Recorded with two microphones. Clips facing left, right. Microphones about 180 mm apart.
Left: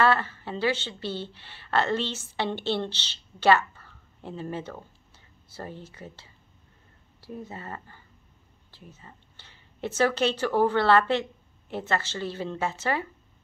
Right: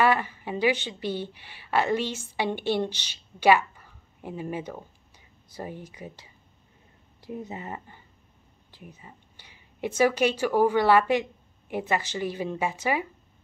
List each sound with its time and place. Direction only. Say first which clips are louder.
0.0 s a woman's voice: even; 15° right (ahead or behind)